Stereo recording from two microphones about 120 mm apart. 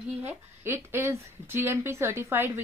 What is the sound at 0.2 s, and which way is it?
A woman's voice, 15° right (ahead or behind).